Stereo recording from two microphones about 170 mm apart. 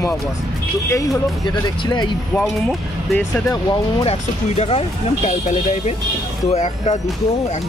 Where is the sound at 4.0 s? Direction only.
35° left (ahead or behind).